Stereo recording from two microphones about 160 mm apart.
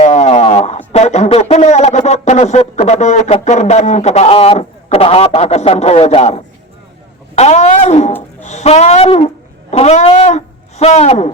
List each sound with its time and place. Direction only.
0.0 s speech: 45° left (ahead or behind)